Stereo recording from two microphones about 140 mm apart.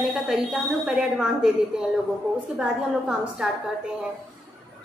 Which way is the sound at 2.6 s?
5° right (ahead or behind).